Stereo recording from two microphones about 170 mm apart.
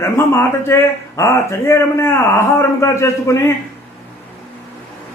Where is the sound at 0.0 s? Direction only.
15° left (ahead or behind).